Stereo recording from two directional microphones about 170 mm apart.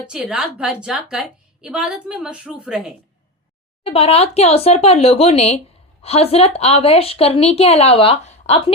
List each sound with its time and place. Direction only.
0.1 s a woman's voice: 5° right (ahead or behind)
3.8 s a woman's voice: 35° left (ahead or behind)